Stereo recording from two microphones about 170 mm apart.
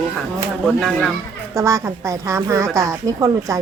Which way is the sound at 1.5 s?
15° right (ahead or behind).